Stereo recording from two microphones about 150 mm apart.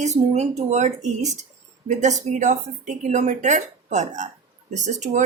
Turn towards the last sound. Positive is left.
turn(degrees=-55)  # may be behind; listen again after turning